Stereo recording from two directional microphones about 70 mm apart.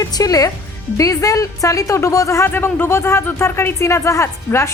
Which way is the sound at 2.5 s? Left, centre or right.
Left.